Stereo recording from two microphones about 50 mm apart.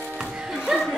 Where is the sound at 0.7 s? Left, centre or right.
Centre.